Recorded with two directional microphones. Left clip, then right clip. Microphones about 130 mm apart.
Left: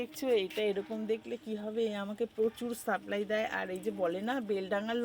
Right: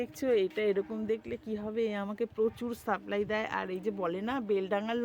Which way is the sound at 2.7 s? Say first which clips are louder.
Right 1 dB; 55° right (ahead or behind).